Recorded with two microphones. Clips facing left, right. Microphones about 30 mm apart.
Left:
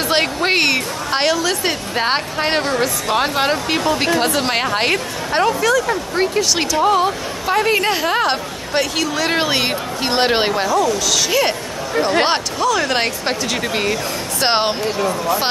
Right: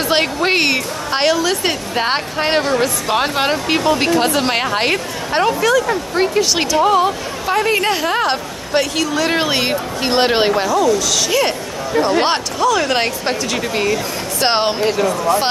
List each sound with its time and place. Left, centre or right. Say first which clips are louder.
0.1 s a woman's voice: right 1 dB; centre